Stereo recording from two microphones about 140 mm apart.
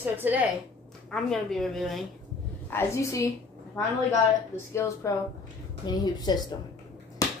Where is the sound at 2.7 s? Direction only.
20° left (ahead or behind).